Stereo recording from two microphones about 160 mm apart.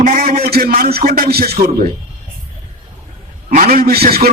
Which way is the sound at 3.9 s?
75° right (ahead or behind).